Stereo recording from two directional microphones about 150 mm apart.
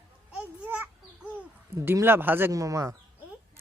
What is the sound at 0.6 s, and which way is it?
Babbling, 10° right (ahead or behind).